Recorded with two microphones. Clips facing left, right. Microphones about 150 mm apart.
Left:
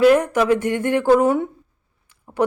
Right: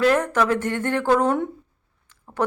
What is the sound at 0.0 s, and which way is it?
Speech, 10° left (ahead or behind).